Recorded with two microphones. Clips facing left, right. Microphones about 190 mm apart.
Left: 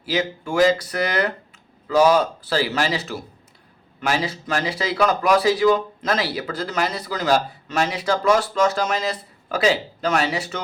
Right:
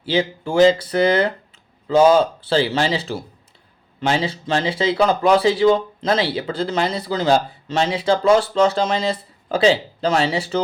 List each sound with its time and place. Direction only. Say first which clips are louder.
0.0 s speech: right 3 dB; 30° right (ahead or behind)